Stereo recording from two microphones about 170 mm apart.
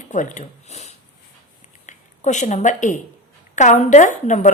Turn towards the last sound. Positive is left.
turn(degrees=45)  # may be behind; listen again after turning